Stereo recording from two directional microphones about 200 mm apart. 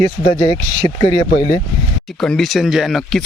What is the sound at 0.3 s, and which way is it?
Speech, 25° left (ahead or behind).